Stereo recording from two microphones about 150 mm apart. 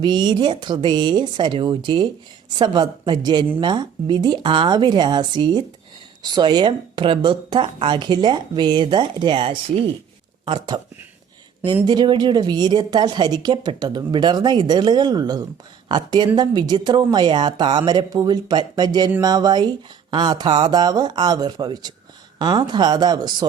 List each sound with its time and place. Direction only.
0.0 s speech: 30° right (ahead or behind)
11.9 s speech: 30° right (ahead or behind)